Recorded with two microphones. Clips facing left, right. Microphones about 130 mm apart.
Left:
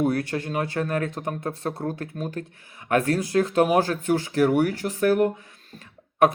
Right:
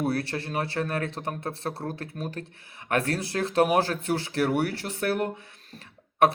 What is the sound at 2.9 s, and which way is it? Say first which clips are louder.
Speech: left 5 dB; 40° left (ahead or behind).